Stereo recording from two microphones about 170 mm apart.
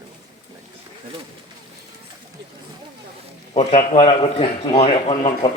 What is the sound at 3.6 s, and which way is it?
A man's voice, 35° left (ahead or behind).